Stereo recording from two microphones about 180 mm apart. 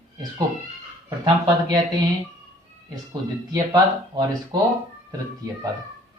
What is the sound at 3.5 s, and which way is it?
Speech, 20° right (ahead or behind).